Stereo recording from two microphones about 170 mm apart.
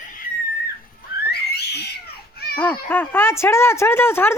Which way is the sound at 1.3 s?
75° left (ahead or behind).